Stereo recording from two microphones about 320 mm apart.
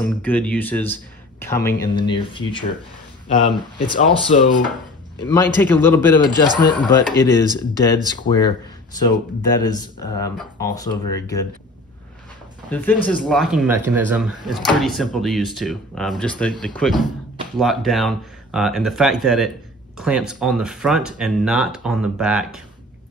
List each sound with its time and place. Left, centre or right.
0.0 s speech: centre
4.4 s speech: left
5.2 s speech: centre
12.6 s speech: centre